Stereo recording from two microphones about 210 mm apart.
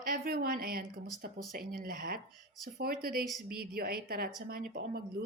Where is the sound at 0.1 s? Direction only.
45° right (ahead or behind).